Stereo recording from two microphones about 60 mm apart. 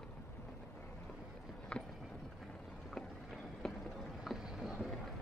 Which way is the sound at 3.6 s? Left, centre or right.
Centre.